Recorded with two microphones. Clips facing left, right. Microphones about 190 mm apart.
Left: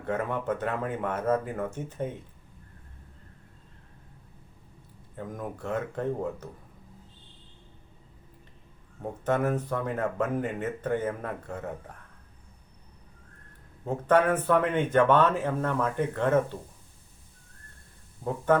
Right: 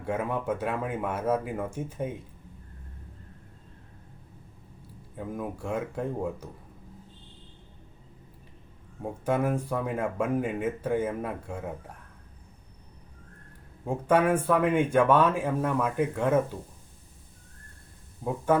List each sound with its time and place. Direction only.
0.0 s speech: 10° right (ahead or behind)
5.1 s speech: 10° right (ahead or behind)
9.2 s speech: 10° right (ahead or behind)
13.8 s speech: 10° right (ahead or behind)